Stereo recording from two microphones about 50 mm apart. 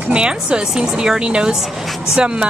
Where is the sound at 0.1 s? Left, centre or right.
Centre.